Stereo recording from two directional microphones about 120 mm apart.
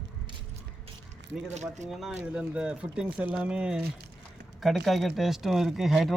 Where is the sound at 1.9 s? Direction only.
5° right (ahead or behind).